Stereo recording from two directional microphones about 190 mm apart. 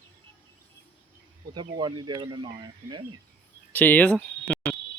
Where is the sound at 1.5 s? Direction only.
20° right (ahead or behind).